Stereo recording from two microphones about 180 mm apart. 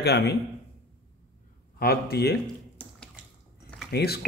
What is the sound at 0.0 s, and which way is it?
Speech, 65° left (ahead or behind).